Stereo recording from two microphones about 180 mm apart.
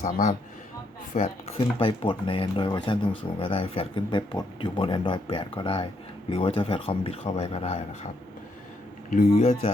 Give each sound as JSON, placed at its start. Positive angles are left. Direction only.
{"t": 0.0, "sound": "a man's voice", "side_deg": 45}
{"t": 1.2, "sound": "speech", "side_deg": 30}
{"t": 9.3, "sound": "speech", "side_deg": 40}